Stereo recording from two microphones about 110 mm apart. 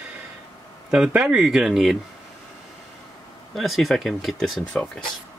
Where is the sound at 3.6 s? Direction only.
Centre (ahead or behind).